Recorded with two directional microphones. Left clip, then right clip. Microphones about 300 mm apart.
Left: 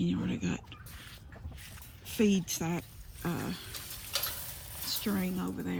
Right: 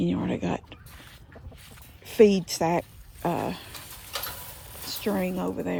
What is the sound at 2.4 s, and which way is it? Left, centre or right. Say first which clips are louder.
Speech: right 11 dB; centre.